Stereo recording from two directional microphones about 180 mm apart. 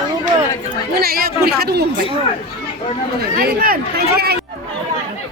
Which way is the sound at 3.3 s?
55° right (ahead or behind).